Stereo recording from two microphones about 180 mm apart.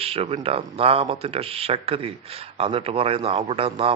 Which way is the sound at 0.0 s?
30° right (ahead or behind).